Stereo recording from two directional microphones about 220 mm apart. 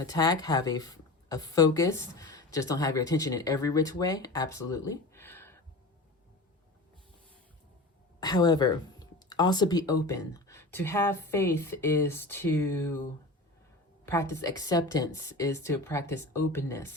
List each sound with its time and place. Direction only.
0.0 s speech: 15° left (ahead or behind)
8.2 s speech: 20° left (ahead or behind)
14.0 s a sound: 10° left (ahead or behind)
14.4 s speech: 15° left (ahead or behind)